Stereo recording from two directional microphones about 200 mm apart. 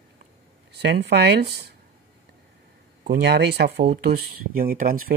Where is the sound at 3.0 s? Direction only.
55° right (ahead or behind).